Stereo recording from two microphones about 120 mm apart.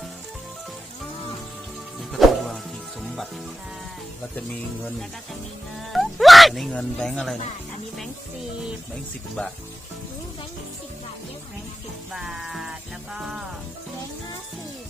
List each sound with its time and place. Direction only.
2.2 s music: centre (ahead or behind)
5.9 s speech: centre (ahead or behind)
9.4 s speech: 10° left (ahead or behind)
12.1 s music: 5° right (ahead or behind)